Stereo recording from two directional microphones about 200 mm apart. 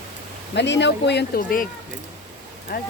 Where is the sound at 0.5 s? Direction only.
60° left (ahead or behind).